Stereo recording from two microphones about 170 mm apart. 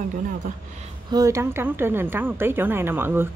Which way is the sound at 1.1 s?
20° right (ahead or behind).